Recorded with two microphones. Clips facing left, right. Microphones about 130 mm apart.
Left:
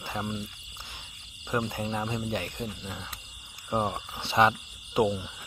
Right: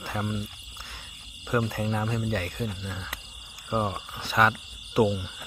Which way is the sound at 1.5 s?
15° left (ahead or behind).